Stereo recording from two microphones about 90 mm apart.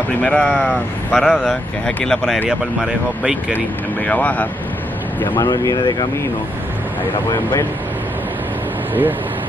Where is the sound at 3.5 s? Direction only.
20° left (ahead or behind).